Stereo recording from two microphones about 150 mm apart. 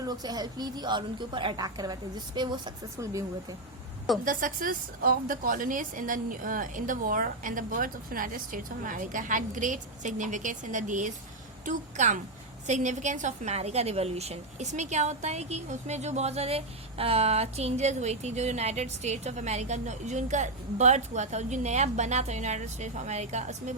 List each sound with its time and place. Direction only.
0.0 s a woman's voice: 25° right (ahead or behind)
4.3 s a woman's voice: 65° right (ahead or behind)